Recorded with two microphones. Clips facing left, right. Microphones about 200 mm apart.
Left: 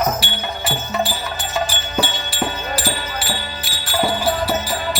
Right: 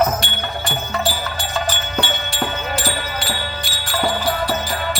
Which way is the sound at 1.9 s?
5° left (ahead or behind).